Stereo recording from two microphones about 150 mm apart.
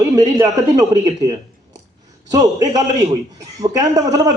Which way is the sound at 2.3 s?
25° right (ahead or behind).